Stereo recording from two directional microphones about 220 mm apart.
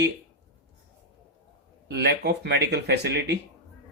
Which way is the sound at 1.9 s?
45° right (ahead or behind).